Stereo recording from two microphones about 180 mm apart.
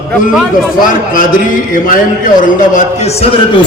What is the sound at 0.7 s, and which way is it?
A man's voice, 50° left (ahead or behind).